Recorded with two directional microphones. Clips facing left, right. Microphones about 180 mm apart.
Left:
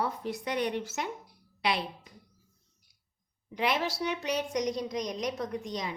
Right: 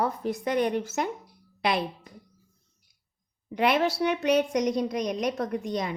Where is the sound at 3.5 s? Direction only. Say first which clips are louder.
Right 6 dB; 60° right (ahead or behind).